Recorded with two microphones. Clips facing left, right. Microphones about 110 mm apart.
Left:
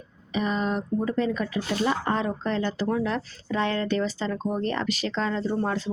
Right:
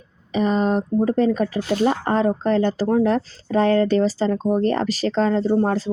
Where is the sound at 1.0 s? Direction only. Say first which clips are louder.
Right 8 dB; 40° right (ahead or behind).